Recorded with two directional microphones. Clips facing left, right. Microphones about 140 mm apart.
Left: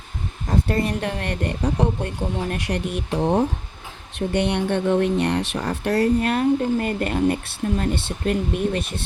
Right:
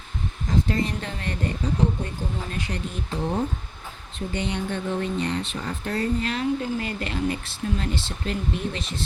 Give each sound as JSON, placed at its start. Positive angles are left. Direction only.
{"t": 0.4, "sound": "speech", "side_deg": 60}